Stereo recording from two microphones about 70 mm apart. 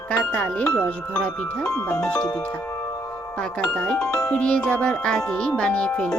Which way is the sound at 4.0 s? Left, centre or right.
Left.